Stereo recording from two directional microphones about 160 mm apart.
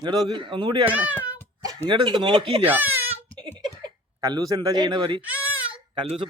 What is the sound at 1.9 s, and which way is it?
Speech, 30° right (ahead or behind).